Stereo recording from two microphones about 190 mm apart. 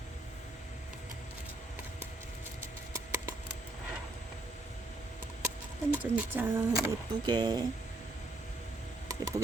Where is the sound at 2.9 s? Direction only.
15° right (ahead or behind).